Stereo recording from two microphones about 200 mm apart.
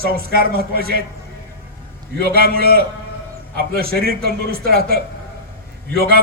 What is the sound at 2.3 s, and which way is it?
A man's voice, 50° right (ahead or behind).